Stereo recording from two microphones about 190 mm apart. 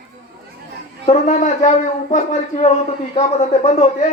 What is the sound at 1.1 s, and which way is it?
Speech, 40° left (ahead or behind).